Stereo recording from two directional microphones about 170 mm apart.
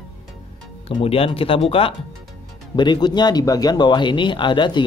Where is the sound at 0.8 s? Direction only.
35° left (ahead or behind).